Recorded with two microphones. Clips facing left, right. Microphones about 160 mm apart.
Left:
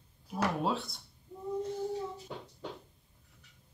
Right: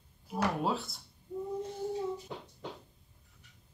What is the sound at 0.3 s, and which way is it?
Speech, centre (ahead or behind).